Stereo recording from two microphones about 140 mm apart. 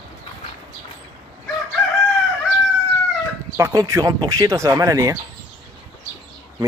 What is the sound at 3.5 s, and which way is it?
Speech, 20° right (ahead or behind).